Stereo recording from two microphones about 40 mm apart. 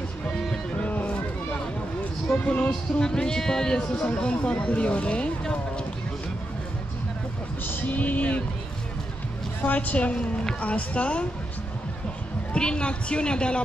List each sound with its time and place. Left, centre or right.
0.7 s a sound: left
2.4 s speech: left
3.1 s speech: centre; by 5.3 s left
7.6 s speech: left
9.6 s a woman's voice: left
12.5 s speech: left